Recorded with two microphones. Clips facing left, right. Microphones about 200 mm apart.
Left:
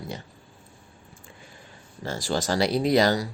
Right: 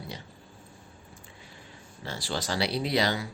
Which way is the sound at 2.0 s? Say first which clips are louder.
Left 6 dB; 45° left (ahead or behind).